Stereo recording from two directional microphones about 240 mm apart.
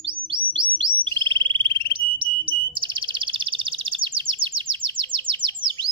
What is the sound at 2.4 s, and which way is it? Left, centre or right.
Chirp, right.